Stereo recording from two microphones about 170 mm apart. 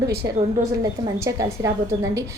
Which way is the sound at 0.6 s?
20° right (ahead or behind).